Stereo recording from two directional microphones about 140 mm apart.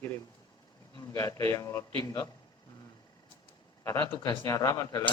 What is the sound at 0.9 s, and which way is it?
Speech, 25° left (ahead or behind).